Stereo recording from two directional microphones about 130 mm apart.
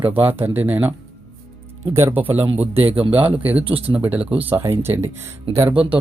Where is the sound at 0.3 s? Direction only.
15° right (ahead or behind).